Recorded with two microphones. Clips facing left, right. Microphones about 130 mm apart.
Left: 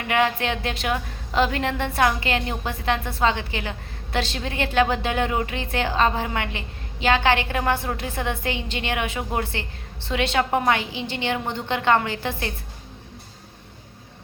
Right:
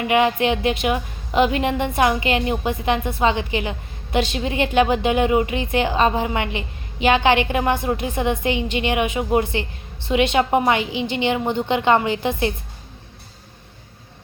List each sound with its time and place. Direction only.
0.1 s a woman's voice: 15° right (ahead or behind)